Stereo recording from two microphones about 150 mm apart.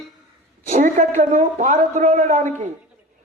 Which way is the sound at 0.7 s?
50° right (ahead or behind).